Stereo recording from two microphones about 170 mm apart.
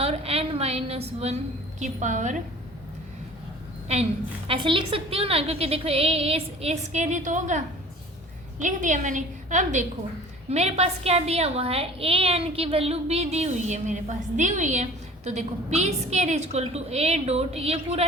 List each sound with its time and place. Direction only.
0.0 s a sound: 35° right (ahead or behind)
1.8 s a woman's voice: 45° right (ahead or behind)
4.4 s a woman's voice: 30° right (ahead or behind)